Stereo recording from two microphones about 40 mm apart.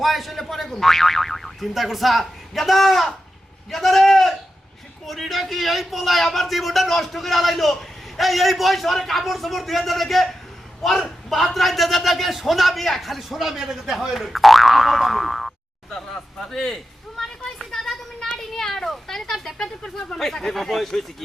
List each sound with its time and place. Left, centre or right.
0.0 s speech: centre
1.7 s a man's voice: centre
15.9 s a sound: centre
19.5 s speech: centre